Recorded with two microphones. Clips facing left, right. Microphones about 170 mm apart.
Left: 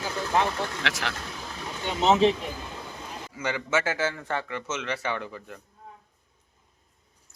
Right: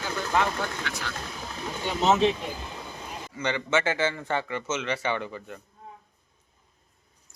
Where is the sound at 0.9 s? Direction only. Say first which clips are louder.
Left 4 dB; 85° left.